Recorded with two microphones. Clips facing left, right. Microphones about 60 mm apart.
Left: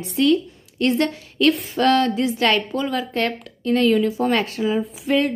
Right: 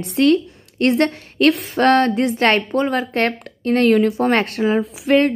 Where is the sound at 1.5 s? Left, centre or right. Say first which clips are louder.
Right 2 dB; right.